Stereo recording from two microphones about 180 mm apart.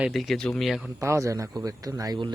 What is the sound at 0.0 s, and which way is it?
Speech, centre (ahead or behind).